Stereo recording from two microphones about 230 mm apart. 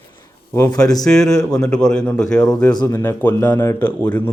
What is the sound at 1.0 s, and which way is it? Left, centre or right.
A man's voice, centre.